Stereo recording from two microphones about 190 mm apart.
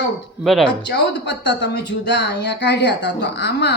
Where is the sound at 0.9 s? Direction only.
65° left (ahead or behind).